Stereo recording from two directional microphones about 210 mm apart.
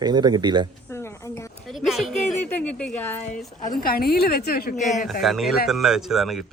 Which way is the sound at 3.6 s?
45° left (ahead or behind).